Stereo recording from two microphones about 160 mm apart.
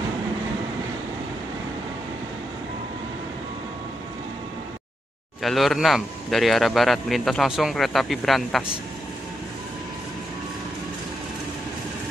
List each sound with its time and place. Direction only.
5.4 s speech: centre (ahead or behind)